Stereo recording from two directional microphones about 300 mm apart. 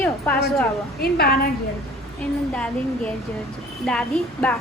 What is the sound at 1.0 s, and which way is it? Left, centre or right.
Speech, left.